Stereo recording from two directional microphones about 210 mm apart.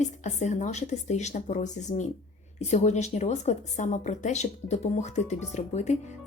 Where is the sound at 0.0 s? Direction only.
35° left (ahead or behind).